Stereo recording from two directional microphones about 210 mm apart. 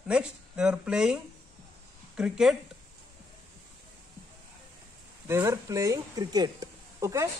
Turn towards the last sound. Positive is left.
turn(degrees=-15)  # may be behind; listen again after turning